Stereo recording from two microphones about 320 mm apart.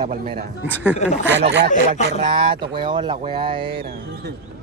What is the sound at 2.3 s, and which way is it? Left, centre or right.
Speech, centre.